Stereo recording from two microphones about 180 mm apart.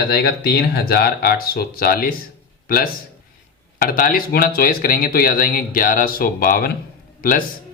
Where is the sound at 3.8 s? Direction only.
50° left (ahead or behind).